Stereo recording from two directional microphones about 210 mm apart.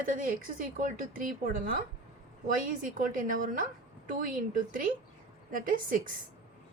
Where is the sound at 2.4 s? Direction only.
40° right (ahead or behind).